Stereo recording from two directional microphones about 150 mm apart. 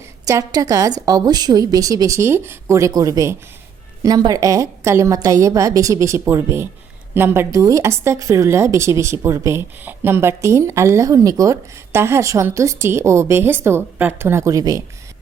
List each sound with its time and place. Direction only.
0.3 s a woman's voice: 20° right (ahead or behind)